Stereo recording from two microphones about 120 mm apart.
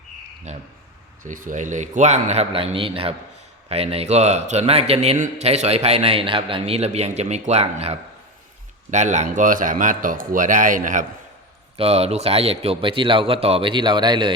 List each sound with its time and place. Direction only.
0.5 s a man's voice: 75° right (ahead or behind)
1.2 s a man's voice: 90° right; by 7.9 s 60° right (ahead or behind)
8.9 s speech: 85° right
11.8 s speech: 60° right (ahead or behind); by 14.3 s 40° right (ahead or behind)